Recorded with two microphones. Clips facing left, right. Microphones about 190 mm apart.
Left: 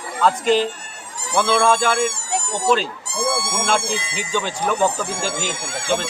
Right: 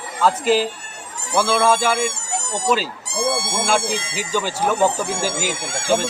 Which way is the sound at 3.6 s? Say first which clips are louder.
Right 2 dB; 5° right (ahead or behind).